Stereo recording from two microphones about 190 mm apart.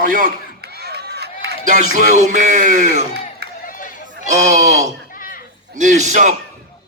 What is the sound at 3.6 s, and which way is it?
Run, 45° left (ahead or behind).